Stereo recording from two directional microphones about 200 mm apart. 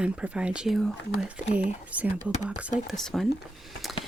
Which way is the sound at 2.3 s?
35° left (ahead or behind).